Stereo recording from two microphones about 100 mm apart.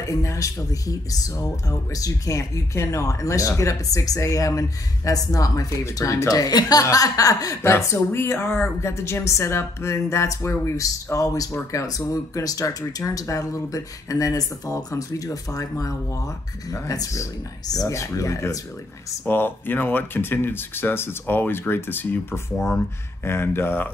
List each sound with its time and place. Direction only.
0.0 s speech: 30° left (ahead or behind)
19.2 s speech: 20° left (ahead or behind)